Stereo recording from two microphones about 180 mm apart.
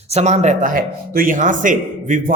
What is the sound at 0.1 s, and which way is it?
A man's voice, 40° right (ahead or behind).